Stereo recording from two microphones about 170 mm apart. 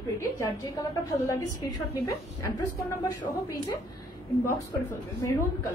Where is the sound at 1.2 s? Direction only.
20° left (ahead or behind).